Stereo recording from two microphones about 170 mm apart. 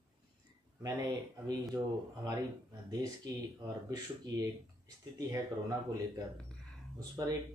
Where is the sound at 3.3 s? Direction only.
25° right (ahead or behind).